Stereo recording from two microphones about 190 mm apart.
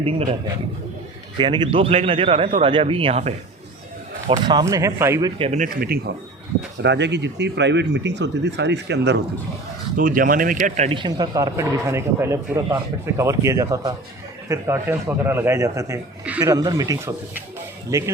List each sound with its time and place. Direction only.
0.0 s speech: 30° right (ahead or behind)
4.3 s speech: 20° right (ahead or behind)
5.4 s speech: 35° right (ahead or behind)
5.6 s speech: 55° right (ahead or behind)
6.8 s speech: 65° right (ahead or behind)
10.0 s speech: 45° right (ahead or behind)
10.9 s speech: 25° right (ahead or behind)